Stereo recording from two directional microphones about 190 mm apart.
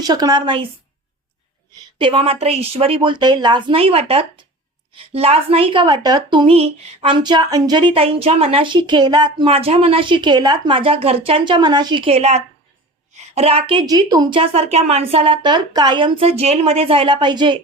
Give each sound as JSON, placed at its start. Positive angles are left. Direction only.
{"t": 0.0, "sound": "a woman's voice", "side_deg": -20}
{"t": 1.7, "sound": "a woman's voice", "side_deg": -25}